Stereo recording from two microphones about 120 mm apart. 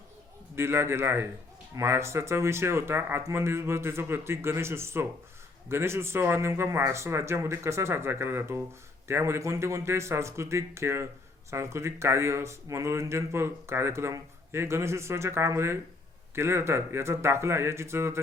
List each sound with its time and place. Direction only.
0.5 s speech: 20° right (ahead or behind)